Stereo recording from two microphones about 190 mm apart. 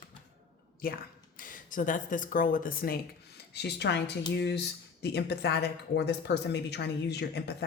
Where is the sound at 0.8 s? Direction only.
50° left (ahead or behind).